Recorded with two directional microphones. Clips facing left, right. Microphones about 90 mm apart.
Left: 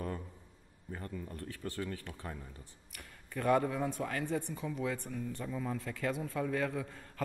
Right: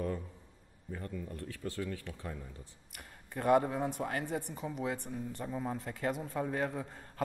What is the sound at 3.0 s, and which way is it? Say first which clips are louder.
A man's voice: even; 30° right (ahead or behind).